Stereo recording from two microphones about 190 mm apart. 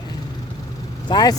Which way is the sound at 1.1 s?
20° left (ahead or behind).